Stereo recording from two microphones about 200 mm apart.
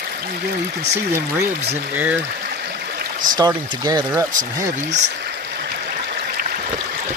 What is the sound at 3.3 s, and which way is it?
Speech, 20° right (ahead or behind).